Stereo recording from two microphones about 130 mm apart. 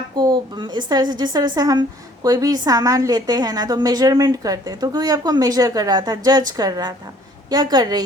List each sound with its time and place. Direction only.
0.2 s a woman's voice: 35° right (ahead or behind)